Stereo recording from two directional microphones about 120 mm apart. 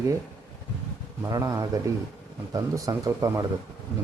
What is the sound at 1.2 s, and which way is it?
Speech, 25° right (ahead or behind).